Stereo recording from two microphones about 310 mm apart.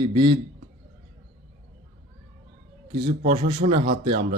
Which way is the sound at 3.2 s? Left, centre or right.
Centre.